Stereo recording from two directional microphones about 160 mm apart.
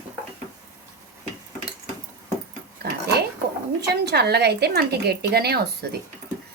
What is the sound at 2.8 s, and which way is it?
Speech, 80° right.